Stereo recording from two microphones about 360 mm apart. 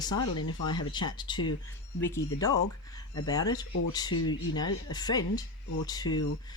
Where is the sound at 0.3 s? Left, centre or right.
Left.